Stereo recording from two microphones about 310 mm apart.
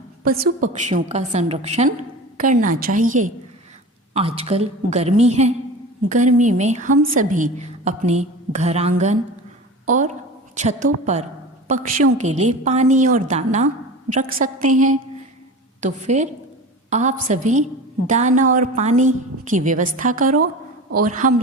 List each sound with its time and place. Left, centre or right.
0.3 s a woman's voice: right